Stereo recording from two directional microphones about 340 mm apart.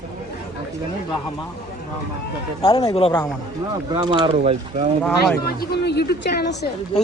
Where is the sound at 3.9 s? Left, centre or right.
Centre.